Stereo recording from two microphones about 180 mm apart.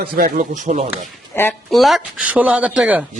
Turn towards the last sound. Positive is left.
turn(degrees=-10)  # may be behind; listen again after turning